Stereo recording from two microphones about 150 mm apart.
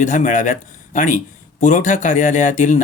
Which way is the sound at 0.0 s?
55° left (ahead or behind).